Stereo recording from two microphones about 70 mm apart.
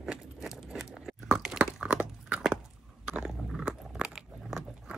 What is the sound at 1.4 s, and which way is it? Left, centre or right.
Chewing, centre.